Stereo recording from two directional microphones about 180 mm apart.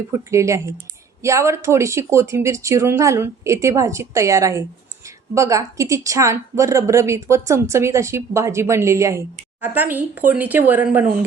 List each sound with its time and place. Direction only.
0.3 s a woman's voice: 15° right (ahead or behind)